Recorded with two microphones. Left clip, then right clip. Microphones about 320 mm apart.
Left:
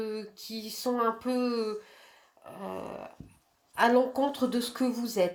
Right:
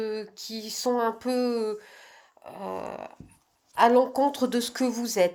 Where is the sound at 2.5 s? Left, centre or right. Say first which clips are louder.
Right 4 dB; right.